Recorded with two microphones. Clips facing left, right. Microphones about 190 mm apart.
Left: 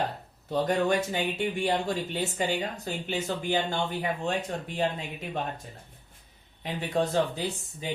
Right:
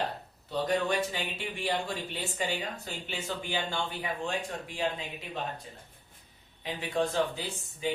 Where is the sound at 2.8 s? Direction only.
40° left (ahead or behind).